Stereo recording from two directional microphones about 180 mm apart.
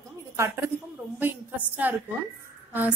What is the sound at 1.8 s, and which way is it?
Speech, 10° right (ahead or behind).